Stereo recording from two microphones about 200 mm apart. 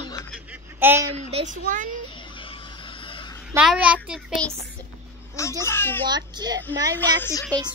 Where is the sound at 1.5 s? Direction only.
40° right (ahead or behind).